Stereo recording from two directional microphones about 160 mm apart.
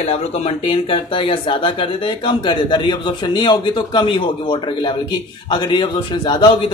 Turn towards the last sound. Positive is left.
turn(degrees=30)  # may be behind; listen again after turning